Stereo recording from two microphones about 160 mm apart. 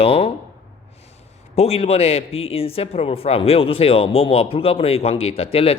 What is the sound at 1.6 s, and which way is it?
A man's voice, 40° left (ahead or behind).